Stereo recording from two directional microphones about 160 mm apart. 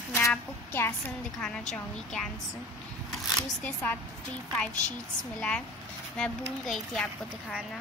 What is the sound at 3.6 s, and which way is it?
Speech, 10° left (ahead or behind).